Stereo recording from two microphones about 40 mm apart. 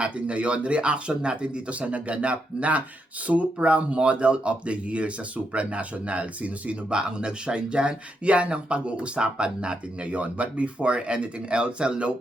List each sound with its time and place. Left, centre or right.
0.0 s speech: right